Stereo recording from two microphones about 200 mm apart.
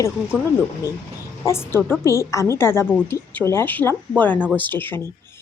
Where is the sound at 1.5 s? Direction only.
10° left (ahead or behind).